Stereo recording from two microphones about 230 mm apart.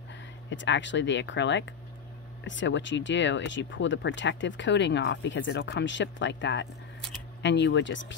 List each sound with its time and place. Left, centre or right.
0.1 s speech: left